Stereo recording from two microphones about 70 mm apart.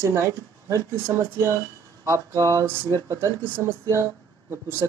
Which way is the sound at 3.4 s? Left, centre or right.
Right.